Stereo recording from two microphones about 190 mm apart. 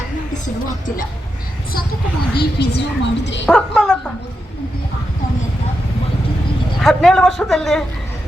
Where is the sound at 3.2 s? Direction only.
70° left (ahead or behind).